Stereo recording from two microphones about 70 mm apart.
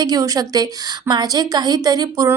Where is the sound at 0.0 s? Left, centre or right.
Right.